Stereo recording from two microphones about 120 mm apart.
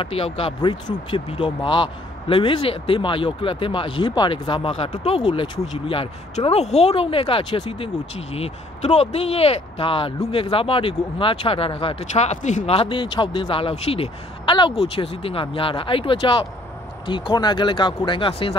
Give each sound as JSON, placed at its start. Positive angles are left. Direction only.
{"t": 0.0, "sound": "speech", "side_deg": 55}
{"t": 0.6, "sound": "a man's voice", "side_deg": 35}
{"t": 6.4, "sound": "a man's voice", "side_deg": 65}
{"t": 12.1, "sound": "a man's voice", "side_deg": 75}